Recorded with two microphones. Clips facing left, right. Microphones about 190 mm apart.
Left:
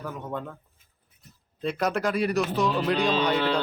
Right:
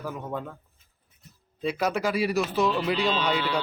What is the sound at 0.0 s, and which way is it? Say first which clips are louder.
Speech: right 1 dB; 5° right (ahead or behind).